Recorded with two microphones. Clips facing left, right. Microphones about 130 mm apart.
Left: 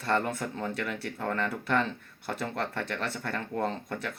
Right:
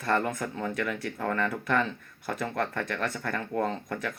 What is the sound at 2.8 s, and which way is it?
Speech, 30° left (ahead or behind).